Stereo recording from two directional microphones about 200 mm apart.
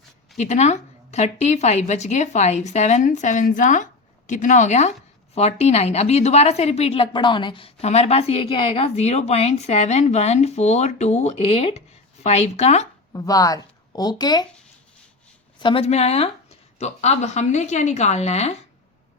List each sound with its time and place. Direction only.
0.3 s a woman's voice: 35° left (ahead or behind)
13.1 s a woman's voice: 20° left (ahead or behind)
15.5 s a woman's voice: 25° left (ahead or behind)